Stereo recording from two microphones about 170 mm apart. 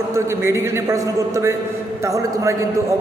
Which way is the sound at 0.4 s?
15° right (ahead or behind).